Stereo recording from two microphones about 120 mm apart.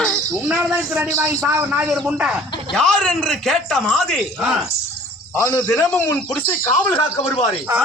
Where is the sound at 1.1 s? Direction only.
25° right (ahead or behind).